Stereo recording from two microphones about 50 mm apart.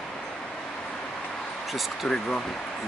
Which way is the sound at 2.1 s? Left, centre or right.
Centre.